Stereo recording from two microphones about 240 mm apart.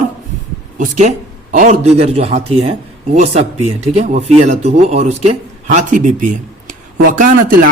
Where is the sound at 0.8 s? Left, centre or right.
Right.